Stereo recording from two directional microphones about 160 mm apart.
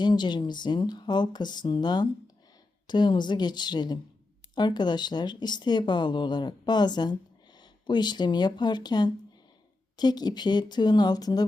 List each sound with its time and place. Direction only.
0.0 s speech: 30° left (ahead or behind)